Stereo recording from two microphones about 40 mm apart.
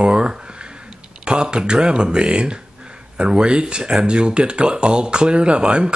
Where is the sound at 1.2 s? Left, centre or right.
Right.